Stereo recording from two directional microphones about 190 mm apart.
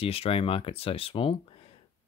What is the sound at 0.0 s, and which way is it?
Speech, 30° left (ahead or behind).